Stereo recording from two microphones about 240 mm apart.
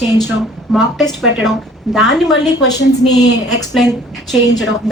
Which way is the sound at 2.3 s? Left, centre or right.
Left.